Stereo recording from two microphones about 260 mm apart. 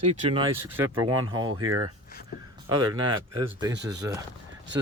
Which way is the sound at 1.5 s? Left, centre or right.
Right.